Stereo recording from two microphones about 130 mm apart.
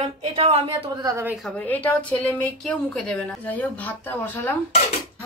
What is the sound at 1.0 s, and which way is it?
Speech, 25° right (ahead or behind).